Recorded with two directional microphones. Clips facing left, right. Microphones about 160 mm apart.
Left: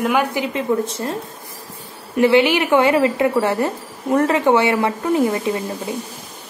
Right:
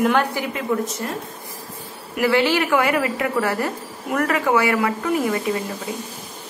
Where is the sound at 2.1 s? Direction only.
25° left (ahead or behind).